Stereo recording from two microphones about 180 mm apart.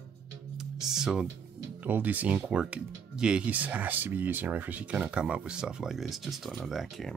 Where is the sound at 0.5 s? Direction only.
5° right (ahead or behind).